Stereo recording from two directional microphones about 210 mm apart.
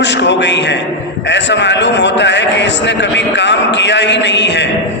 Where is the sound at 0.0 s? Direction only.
55° left (ahead or behind).